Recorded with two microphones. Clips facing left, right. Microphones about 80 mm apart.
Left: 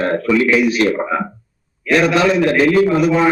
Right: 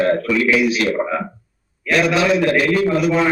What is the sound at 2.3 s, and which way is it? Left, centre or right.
Speech, centre.